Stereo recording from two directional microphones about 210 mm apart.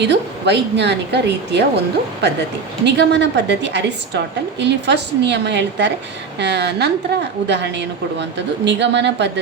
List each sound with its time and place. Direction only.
0.0 s a woman's voice: 55° right (ahead or behind)
2.8 s a woman's voice: 55° right (ahead or behind)